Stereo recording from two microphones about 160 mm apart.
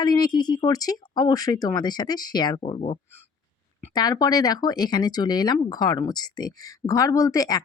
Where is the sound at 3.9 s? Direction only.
25° left (ahead or behind).